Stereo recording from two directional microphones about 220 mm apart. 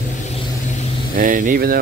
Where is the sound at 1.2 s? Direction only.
40° right (ahead or behind).